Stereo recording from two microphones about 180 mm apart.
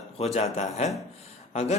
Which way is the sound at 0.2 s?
35° left (ahead or behind).